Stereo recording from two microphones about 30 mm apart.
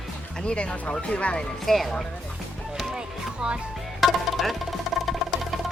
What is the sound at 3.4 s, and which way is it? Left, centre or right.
Speech, right.